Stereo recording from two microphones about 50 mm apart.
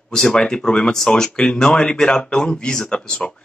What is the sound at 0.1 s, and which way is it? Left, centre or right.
Speech, centre.